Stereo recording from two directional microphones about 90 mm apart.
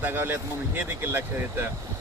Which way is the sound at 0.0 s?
25° right (ahead or behind).